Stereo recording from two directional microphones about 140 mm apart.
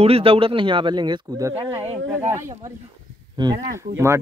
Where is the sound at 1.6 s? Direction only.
45° right (ahead or behind).